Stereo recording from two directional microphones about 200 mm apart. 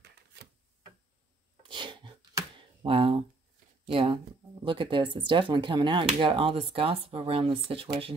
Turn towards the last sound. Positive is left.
turn(degrees=-25)  # may be behind; listen again after turning